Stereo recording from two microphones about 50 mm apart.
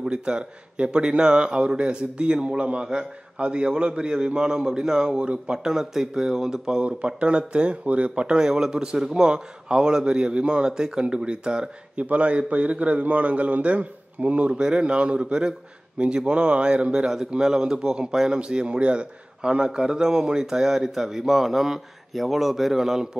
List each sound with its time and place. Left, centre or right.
0.0 s speech: centre
12.0 s a man's voice: right; by 23.0 s centre